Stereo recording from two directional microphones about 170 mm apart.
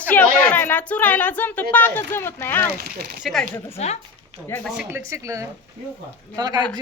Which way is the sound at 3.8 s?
40° left (ahead or behind).